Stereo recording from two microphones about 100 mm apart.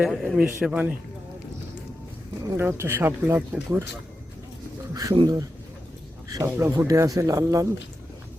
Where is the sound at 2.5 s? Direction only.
25° right (ahead or behind).